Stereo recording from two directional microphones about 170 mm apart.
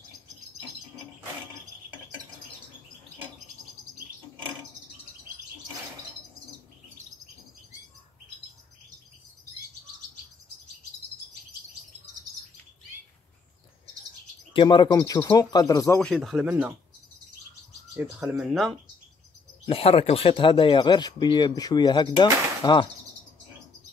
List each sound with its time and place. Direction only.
14.5 s speech: 25° left (ahead or behind)
16.0 s speech: centre (ahead or behind)
17.9 s speech: 5° right (ahead or behind)
19.6 s speech: 35° left (ahead or behind)